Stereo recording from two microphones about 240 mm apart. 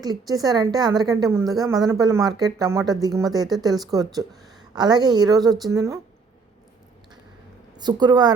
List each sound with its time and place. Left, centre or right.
0.0 s a woman's voice: centre
7.8 s a woman's voice: centre